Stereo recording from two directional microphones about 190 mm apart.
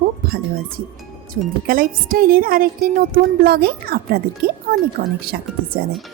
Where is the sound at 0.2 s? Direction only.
55° right (ahead or behind).